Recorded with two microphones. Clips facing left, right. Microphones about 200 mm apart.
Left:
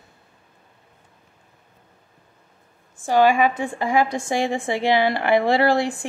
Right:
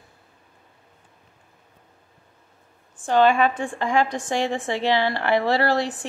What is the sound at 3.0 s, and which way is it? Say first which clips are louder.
A woman's voice: left 1 dB; 10° left (ahead or behind).